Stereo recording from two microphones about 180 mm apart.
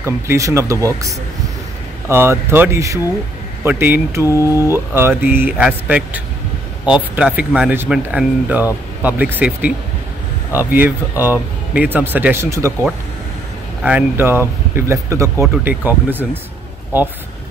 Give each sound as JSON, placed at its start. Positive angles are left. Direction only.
{"t": 0.0, "sound": "speech", "side_deg": -15}
{"t": 13.8, "sound": "speech", "side_deg": -10}